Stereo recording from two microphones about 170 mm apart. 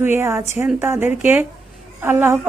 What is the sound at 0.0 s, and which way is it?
Speech, 15° right (ahead or behind).